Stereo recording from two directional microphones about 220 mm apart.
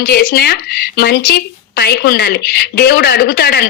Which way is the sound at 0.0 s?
45° left (ahead or behind).